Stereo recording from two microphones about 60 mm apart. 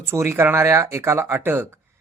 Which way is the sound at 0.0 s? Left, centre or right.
Right.